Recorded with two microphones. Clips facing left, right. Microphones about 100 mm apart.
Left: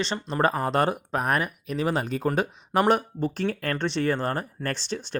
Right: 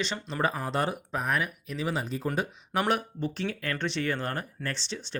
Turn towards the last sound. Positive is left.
turn(degrees=50)  # may be behind; listen again after turning